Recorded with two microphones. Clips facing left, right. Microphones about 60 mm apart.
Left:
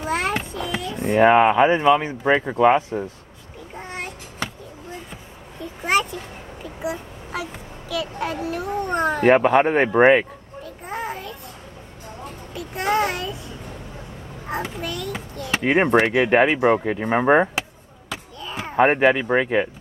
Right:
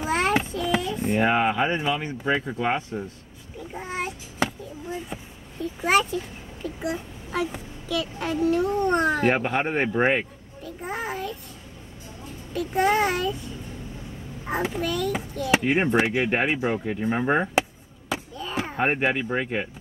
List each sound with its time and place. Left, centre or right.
0.0 s a sound: centre
1.0 s speech: left
2.0 s speech: left
3.7 s a sound: centre
6.8 s a child's voice: centre
9.2 s speech: left
10.6 s babbling: centre
12.5 s a child's voice: centre
14.5 s a child's voice: centre
15.6 s speech: left
18.4 s a sound: centre
18.8 s speech: left